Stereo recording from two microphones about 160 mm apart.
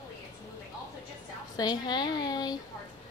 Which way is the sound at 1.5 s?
25° left (ahead or behind).